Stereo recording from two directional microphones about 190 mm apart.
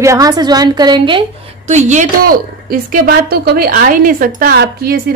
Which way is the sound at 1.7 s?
40° right (ahead or behind).